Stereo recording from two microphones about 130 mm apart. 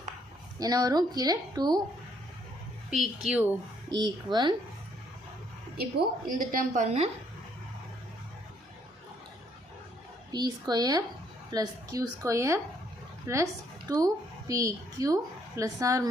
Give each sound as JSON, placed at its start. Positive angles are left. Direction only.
{"t": 0.6, "sound": "speech", "side_deg": -30}
{"t": 2.9, "sound": "speech", "side_deg": -5}
{"t": 3.9, "sound": "a woman's voice", "side_deg": -35}
{"t": 6.2, "sound": "a woman's voice", "side_deg": -90}
{"t": 10.3, "sound": "a woman's voice", "side_deg": -30}